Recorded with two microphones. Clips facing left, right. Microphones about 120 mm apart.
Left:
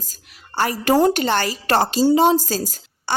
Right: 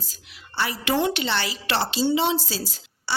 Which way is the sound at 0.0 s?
45° left (ahead or behind).